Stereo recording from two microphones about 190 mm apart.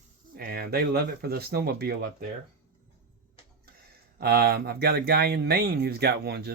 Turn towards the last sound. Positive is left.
turn(degrees=-60)  # may be behind; listen again after turning